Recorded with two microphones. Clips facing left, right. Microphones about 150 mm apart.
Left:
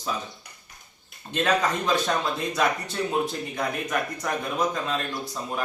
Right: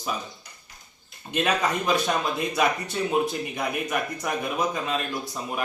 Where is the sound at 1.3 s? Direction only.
10° right (ahead or behind).